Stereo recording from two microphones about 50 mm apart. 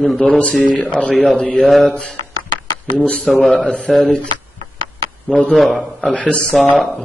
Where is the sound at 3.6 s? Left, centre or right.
Left.